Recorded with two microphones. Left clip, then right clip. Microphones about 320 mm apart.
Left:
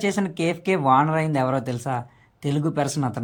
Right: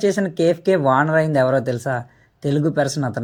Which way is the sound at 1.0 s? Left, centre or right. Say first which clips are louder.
Right 6 dB; centre.